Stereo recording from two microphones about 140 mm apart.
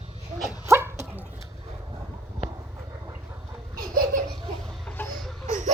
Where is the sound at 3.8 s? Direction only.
85° right.